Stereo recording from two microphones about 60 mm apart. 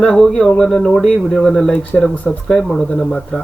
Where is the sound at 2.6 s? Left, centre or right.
Centre.